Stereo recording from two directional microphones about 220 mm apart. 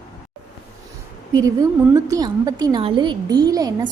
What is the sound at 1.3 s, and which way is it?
A woman's voice, 15° right (ahead or behind).